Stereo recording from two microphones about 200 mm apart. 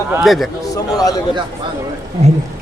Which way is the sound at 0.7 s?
20° left (ahead or behind).